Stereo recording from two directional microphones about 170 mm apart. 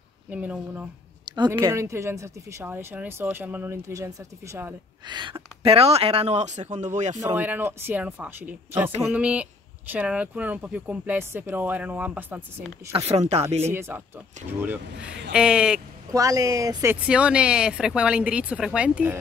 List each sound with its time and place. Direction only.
0.3 s speech: 10° right (ahead or behind)
1.2 s speech: 25° right (ahead or behind)
5.0 s speech: 25° right (ahead or behind); by 7.2 s 45° right (ahead or behind)
7.3 s speech: 10° right (ahead or behind)
12.9 s speech: 40° right (ahead or behind)
13.7 s speech: 15° right (ahead or behind)
16.1 s speech: 20° right (ahead or behind)
16.9 s speech: 5° right (ahead or behind)